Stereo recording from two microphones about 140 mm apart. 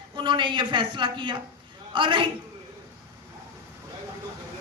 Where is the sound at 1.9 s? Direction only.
35° right (ahead or behind).